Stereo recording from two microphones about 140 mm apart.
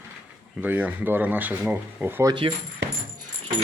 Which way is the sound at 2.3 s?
35° right (ahead or behind).